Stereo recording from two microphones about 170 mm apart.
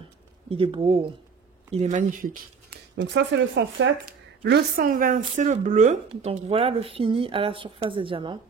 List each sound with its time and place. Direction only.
0.5 s a woman's voice: 35° right (ahead or behind); by 2.3 s 50° right (ahead or behind)
3.0 s speech: 90° right
4.5 s a woman's voice: 70° right (ahead or behind)
4.8 s a woman's voice: 50° right (ahead or behind)
6.0 s speech: 35° right (ahead or behind)